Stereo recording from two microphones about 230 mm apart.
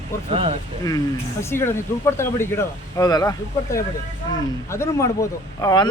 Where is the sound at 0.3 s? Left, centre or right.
Right.